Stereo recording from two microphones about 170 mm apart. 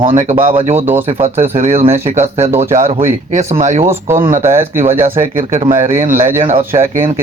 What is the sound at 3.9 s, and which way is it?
Speech, 15° right (ahead or behind).